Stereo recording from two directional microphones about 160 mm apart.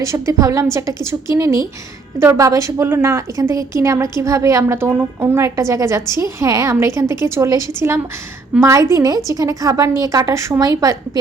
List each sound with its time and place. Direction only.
0.0 s a woman's voice: 20° right (ahead or behind)
2.1 s a woman's voice: 15° right (ahead or behind)